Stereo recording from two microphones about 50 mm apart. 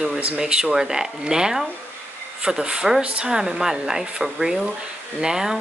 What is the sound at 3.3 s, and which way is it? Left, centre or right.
Speech, centre.